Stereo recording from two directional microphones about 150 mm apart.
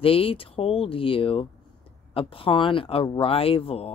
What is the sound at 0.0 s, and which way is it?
Speech, 40° left (ahead or behind).